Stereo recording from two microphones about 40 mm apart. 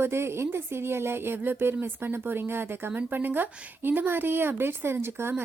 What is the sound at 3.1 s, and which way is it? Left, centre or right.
Speech, right.